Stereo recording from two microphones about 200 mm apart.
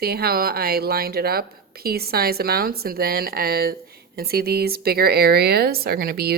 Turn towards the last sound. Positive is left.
turn(degrees=-50)  # may be behind; listen again after turning